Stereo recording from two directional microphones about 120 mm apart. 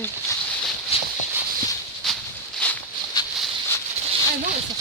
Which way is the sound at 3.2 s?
35° left (ahead or behind).